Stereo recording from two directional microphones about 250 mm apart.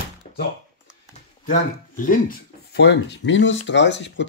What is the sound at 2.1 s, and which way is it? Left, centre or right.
Speech, left.